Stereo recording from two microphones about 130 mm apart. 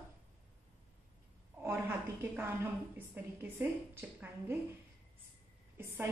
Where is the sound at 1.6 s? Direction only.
20° right (ahead or behind).